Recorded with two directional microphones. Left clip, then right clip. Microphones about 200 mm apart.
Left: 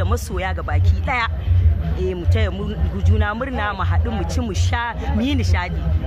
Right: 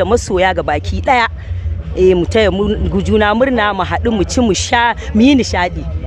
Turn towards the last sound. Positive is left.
turn(degrees=-50)  # may be behind; listen again after turning